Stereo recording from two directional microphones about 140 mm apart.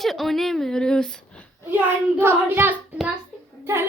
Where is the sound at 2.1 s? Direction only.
15° right (ahead or behind).